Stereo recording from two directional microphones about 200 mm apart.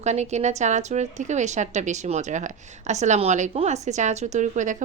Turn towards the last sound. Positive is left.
turn(degrees=-40)  # may be behind; listen again after turning